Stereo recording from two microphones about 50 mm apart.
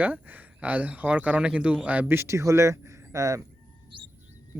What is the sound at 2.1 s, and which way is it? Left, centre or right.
Speech, right.